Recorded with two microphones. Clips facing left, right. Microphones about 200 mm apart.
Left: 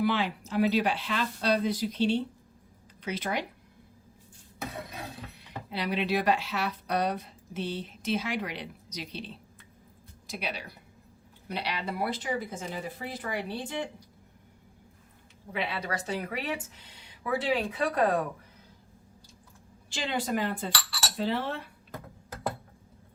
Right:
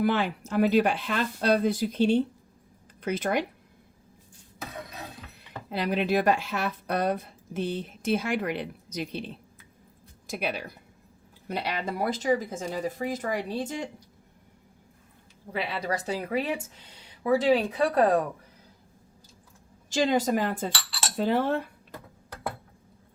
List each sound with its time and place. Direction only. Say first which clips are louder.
0.0 s speech: right 2 dB; 50° right (ahead or behind)
5.6 s speech: right 4 dB; 45° right (ahead or behind)
15.5 s speech: right 3 dB; 35° right (ahead or behind)
19.9 s speech: right 7 dB; 40° right (ahead or behind)